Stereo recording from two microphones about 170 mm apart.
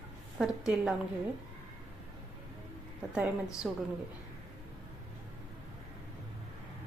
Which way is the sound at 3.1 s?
5° right (ahead or behind).